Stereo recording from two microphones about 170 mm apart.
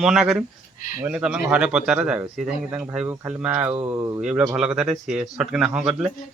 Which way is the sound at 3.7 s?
30° right (ahead or behind).